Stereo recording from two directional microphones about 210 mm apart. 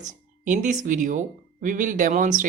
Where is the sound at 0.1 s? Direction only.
35° right (ahead or behind).